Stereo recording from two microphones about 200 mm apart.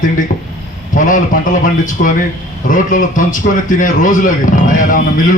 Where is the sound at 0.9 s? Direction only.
40° left (ahead or behind).